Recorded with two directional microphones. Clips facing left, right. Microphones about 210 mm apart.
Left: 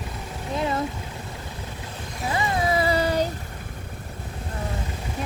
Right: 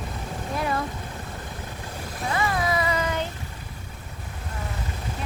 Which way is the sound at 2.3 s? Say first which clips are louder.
Left 1 dB; 25° left (ahead or behind).